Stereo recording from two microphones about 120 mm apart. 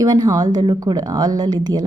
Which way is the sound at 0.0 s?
30° right (ahead or behind).